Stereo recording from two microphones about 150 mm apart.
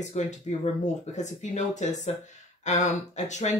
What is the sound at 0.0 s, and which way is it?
Speech, 50° left (ahead or behind).